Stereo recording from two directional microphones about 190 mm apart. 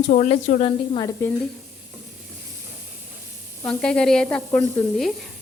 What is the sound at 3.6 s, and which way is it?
Sizzle, 5° left (ahead or behind).